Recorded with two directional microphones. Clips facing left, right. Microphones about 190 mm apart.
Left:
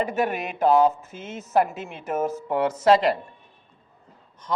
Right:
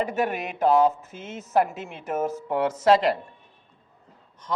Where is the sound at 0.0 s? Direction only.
10° left (ahead or behind).